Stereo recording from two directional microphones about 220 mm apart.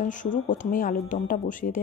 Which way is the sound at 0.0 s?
35° left (ahead or behind).